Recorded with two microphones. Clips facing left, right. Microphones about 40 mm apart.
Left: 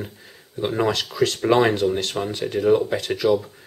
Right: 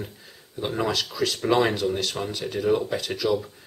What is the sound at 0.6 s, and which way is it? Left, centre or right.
Speech, centre.